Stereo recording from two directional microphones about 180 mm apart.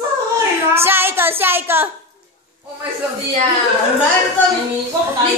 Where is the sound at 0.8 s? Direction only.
10° right (ahead or behind).